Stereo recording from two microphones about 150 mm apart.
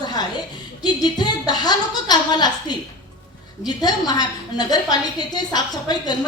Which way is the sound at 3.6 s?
25° left (ahead or behind).